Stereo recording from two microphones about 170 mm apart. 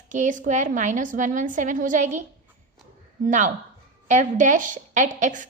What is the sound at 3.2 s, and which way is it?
A woman's voice, 45° right (ahead or behind).